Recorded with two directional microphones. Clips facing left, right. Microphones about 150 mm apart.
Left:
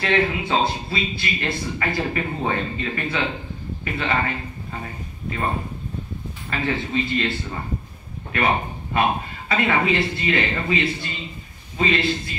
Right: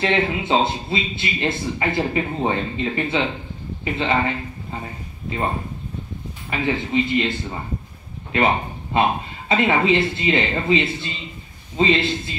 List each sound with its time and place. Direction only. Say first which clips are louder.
0.0 s a man's voice: right 1 dB; 20° right (ahead or behind)
6.5 s a man's voice: right 3 dB; 15° right (ahead or behind)